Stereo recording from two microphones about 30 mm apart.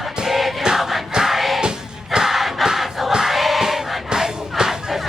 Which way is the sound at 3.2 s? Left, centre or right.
Centre.